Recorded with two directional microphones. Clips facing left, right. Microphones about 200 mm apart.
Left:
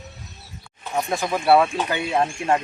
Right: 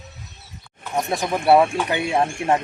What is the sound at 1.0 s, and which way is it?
A woman's voice, 25° right (ahead or behind).